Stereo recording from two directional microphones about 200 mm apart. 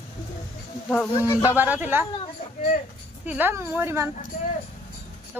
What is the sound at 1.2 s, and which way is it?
Speech, 15° left (ahead or behind).